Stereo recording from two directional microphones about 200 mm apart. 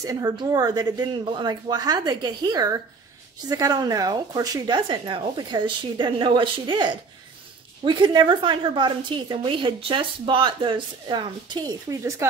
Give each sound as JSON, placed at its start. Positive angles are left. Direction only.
{"t": 0.0, "sound": "a woman's voice", "side_deg": -20}